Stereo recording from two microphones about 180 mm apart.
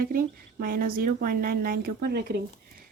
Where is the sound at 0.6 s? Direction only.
55° right (ahead or behind).